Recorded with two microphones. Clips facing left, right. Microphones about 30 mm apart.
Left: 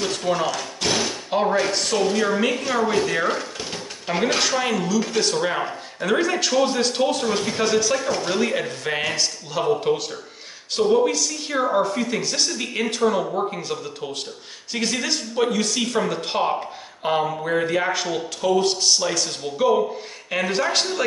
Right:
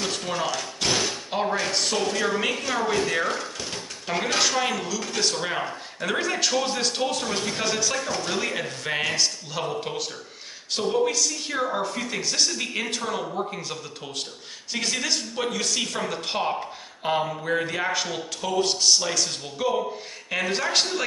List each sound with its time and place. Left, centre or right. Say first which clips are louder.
0.0 s speech: left 5 dB; centre
13.2 s speech: left 5 dB; centre
13.5 s speech: left 5 dB; centre